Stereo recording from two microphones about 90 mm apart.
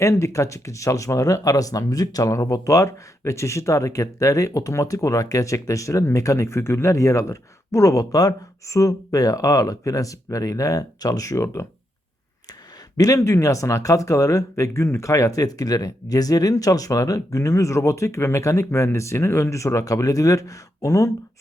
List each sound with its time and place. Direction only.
0.0 s speech: 35° left (ahead or behind)
13.0 s speech: 35° left (ahead or behind)